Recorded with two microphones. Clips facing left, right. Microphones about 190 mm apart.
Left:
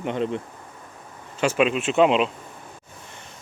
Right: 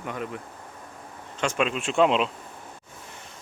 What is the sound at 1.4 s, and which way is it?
Speech, 5° left (ahead or behind).